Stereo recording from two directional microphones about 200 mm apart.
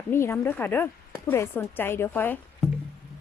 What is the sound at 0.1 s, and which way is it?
Speech, 10° left (ahead or behind).